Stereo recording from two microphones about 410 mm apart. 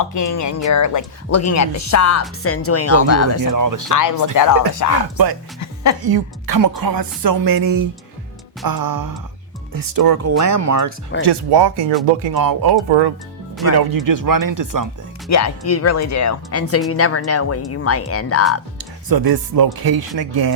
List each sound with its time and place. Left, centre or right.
0.0 s speech: left
3.4 s speech: right
3.8 s speech: left
5.1 s speech: right
10.2 s speech: right
11.3 s speech: right
12.3 s speech: right
15.3 s speech: left
19.0 s speech: right